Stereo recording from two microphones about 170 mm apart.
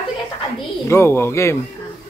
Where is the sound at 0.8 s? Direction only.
15° left (ahead or behind).